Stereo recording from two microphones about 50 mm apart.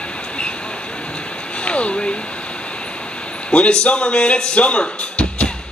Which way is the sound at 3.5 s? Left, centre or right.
Left.